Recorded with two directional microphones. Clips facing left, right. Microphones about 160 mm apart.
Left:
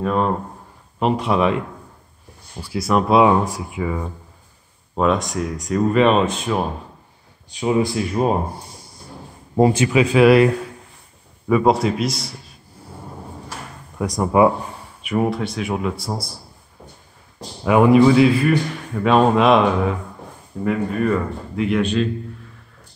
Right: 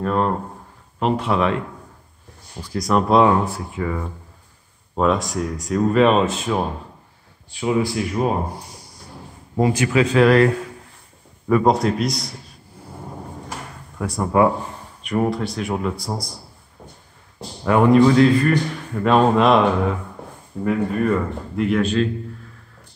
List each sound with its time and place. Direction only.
0.0 s a man's voice: 10° left (ahead or behind)
2.6 s a man's voice: 5° left (ahead or behind)
4.9 s speech: centre (ahead or behind)
7.5 s speech: 20° left (ahead or behind)
9.6 s speech: 25° left (ahead or behind)
9.9 s a man's voice: 10° left (ahead or behind)
13.9 s a man's voice: 15° left (ahead or behind)
15.0 s speech: 5° left (ahead or behind)
17.6 s a man's voice: 10° left (ahead or behind)